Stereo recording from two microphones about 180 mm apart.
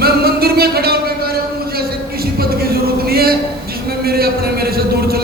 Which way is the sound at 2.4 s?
60° right (ahead or behind).